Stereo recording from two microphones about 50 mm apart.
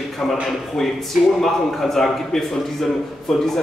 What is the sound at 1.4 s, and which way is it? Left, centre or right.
A man's voice, centre.